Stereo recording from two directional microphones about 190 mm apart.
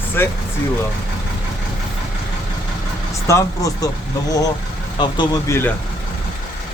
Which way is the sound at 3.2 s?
15° left (ahead or behind).